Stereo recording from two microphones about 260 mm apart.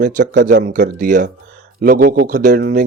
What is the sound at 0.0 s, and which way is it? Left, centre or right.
A man's voice, right.